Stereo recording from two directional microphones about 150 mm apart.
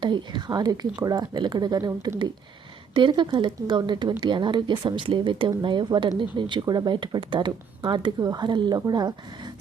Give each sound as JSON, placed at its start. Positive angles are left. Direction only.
{"t": 0.0, "sound": "a woman's voice", "side_deg": -30}